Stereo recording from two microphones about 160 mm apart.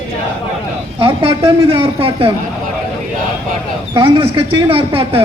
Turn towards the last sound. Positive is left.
turn(degrees=-35)  # may be behind; listen again after turning